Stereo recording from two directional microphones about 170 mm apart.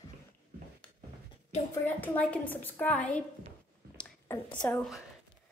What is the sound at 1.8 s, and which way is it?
A woman's voice, 10° left (ahead or behind).